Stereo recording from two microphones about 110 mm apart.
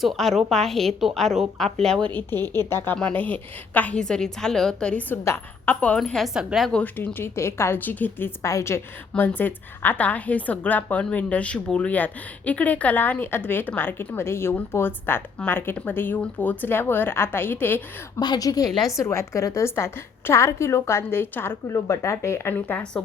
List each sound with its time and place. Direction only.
0.0 s a woman's voice: centre (ahead or behind)
2.1 s speech: 20° left (ahead or behind)
6.0 s a woman's voice: centre (ahead or behind)
6.7 s a woman's voice: 15° left (ahead or behind)
18.2 s a woman's voice: 35° left (ahead or behind); by 23.0 s 10° left (ahead or behind)